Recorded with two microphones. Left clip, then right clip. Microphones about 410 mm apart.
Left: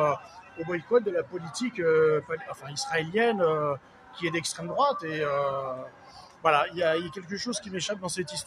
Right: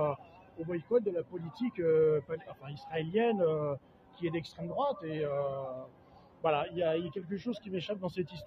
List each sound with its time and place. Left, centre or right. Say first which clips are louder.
0.7 s speech: left 6 dB; right